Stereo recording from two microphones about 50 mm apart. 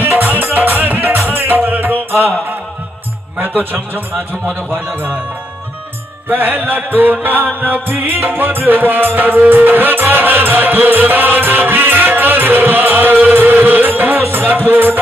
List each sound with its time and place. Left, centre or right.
0.0 s music: right
3.3 s music: right
6.2 s music: right